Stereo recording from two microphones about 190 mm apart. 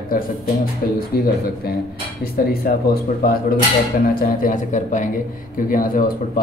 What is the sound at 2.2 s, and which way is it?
Speech, 55° left (ahead or behind).